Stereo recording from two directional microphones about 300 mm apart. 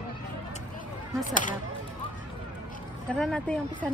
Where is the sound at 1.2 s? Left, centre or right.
Left.